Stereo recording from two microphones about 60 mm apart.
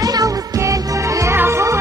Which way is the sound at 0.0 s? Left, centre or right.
Right.